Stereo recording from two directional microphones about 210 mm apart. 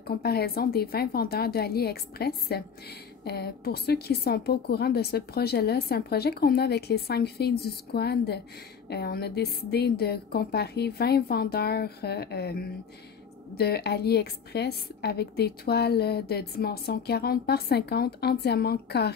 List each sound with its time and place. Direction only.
0.0 s a woman's voice: 50° left (ahead or behind)